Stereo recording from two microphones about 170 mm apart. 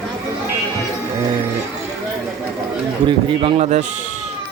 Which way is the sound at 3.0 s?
30° right (ahead or behind).